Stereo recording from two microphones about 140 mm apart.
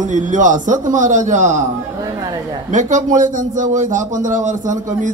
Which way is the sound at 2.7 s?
60° right (ahead or behind).